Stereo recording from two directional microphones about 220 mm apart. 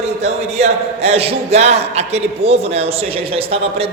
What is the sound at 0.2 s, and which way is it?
A man's voice, 30° right (ahead or behind).